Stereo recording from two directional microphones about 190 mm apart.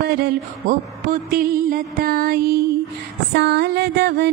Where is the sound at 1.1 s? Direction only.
50° right (ahead or behind).